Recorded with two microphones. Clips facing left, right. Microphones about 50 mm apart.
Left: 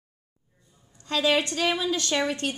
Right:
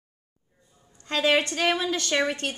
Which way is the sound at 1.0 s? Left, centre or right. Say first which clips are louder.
Right 1 dB; centre.